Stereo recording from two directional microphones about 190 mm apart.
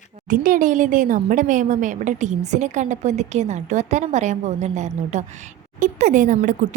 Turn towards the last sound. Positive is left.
turn(degrees=-40)  # may be behind; listen again after turning